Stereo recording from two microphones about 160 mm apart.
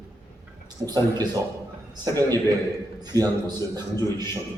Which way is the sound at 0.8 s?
25° right (ahead or behind).